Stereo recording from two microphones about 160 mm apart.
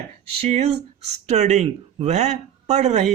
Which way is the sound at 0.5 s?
40° right (ahead or behind).